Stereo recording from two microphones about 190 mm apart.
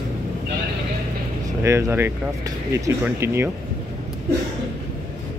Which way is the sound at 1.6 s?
15° right (ahead or behind).